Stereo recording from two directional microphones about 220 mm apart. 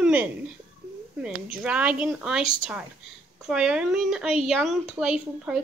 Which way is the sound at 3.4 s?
5° right (ahead or behind).